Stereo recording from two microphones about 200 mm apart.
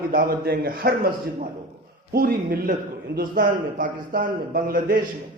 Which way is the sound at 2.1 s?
50° right (ahead or behind).